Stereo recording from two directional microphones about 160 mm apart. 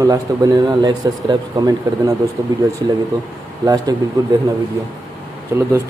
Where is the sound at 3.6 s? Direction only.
20° right (ahead or behind).